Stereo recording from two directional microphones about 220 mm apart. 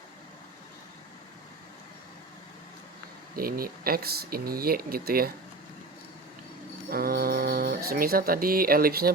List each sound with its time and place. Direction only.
3.3 s speech: 40° right (ahead or behind)
6.9 s music: 45° right (ahead or behind)